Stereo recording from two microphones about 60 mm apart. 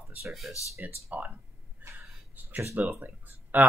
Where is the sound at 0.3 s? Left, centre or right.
Centre.